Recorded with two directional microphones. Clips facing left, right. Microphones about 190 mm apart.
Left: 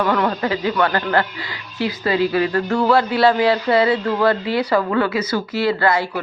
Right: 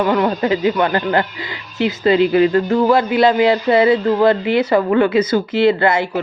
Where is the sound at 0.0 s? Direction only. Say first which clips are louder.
Right 3 dB; 15° right (ahead or behind).